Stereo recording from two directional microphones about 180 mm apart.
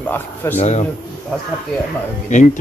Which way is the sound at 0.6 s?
40° left (ahead or behind).